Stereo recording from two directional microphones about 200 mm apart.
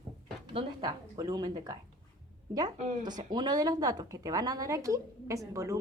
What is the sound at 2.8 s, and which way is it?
Speech, 35° right (ahead or behind).